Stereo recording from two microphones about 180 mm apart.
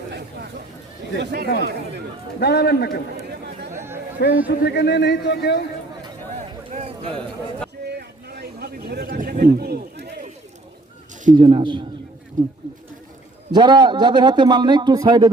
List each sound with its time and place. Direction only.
1.2 s speech: 65° right (ahead or behind)
2.4 s a man's voice: 65° left (ahead or behind)
3.2 s chatter: 65° right (ahead or behind)
3.8 s chatter: 15° right (ahead or behind)
4.2 s a man's voice: 70° left (ahead or behind)
6.7 s a sound: 35° right (ahead or behind)
7.1 s a man's voice: 5° left (ahead or behind)
7.9 s a sound: 60° right (ahead or behind)
11.3 s a man's voice: 25° right (ahead or behind)
12.4 s speech: 45° right (ahead or behind)
13.5 s a man's voice: 25° right (ahead or behind)